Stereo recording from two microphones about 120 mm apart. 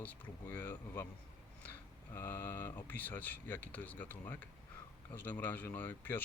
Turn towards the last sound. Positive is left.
turn(degrees=15)  # may be behind; listen again after turning